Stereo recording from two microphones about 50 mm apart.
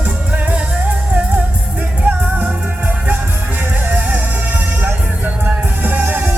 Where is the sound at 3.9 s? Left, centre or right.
Right.